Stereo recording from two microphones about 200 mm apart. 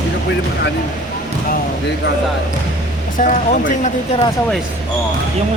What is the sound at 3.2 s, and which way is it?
Speech, 40° left (ahead or behind).